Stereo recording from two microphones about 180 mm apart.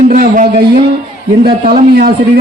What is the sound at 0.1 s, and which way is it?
Speech, 45° right (ahead or behind).